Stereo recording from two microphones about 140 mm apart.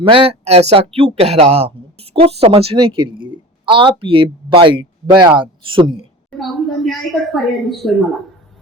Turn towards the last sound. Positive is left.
turn(degrees=0)  # may be behind; listen again after turning